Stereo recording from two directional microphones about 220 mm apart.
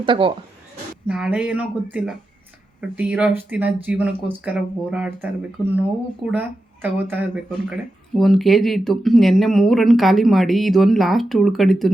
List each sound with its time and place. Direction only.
0.0 s speech: 25° right (ahead or behind)
1.0 s speech: 5° right (ahead or behind)